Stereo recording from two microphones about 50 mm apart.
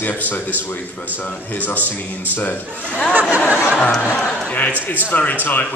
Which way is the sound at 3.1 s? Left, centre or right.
Right.